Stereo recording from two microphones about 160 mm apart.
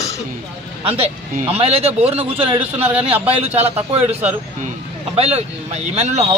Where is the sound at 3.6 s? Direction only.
40° right (ahead or behind).